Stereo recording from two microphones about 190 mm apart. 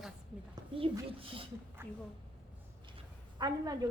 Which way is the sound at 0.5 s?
25° right (ahead or behind).